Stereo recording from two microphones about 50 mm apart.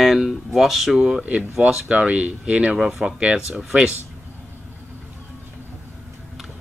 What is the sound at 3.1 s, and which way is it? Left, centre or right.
Speech, right.